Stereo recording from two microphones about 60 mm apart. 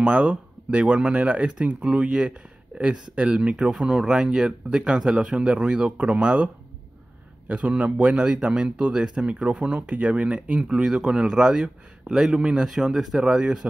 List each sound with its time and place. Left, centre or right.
0.0 s speech: centre